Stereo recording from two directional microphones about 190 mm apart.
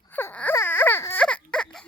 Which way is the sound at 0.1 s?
10° left (ahead or behind).